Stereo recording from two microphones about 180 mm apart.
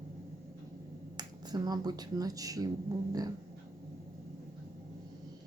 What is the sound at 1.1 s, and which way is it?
Speech, 25° right (ahead or behind).